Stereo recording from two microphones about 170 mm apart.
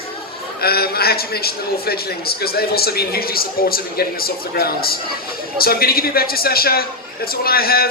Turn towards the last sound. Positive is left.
turn(degrees=60)  # may be behind; listen again after turning